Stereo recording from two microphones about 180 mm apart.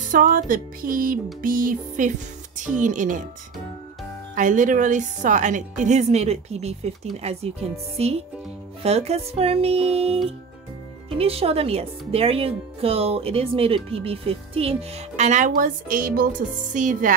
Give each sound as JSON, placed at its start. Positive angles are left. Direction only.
{"t": 0.1, "sound": "a woman's voice", "side_deg": -50}
{"t": 4.4, "sound": "a woman's voice", "side_deg": -45}